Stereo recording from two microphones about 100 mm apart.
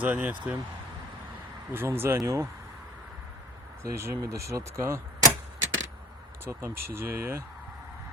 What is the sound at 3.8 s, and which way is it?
Speech, 30° right (ahead or behind).